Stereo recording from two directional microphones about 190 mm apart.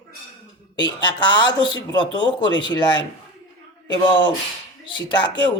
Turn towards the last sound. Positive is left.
turn(degrees=25)  # may be behind; listen again after turning